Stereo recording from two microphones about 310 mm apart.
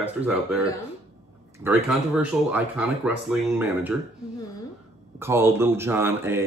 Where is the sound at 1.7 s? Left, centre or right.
Centre.